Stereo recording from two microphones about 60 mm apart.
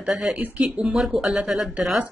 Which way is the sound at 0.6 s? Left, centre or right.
Centre.